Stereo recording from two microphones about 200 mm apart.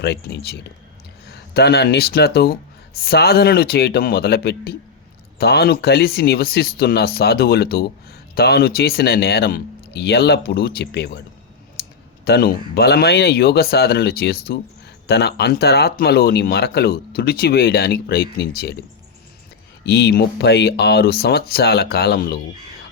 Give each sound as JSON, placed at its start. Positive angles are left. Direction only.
{"t": 0.0, "sound": "speech", "side_deg": 60}
{"t": 12.2, "sound": "speech", "side_deg": 50}
{"t": 19.8, "sound": "speech", "side_deg": 55}